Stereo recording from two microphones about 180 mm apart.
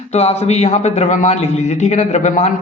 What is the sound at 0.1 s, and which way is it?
A man's voice, 35° left (ahead or behind).